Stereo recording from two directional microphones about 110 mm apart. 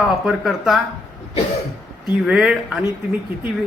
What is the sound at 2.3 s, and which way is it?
Speech, 10° right (ahead or behind).